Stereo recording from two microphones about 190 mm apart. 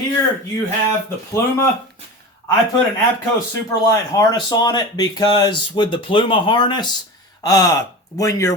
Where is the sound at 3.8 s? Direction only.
20° left (ahead or behind).